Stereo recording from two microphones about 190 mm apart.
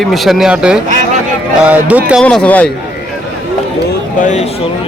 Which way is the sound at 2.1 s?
5° left (ahead or behind).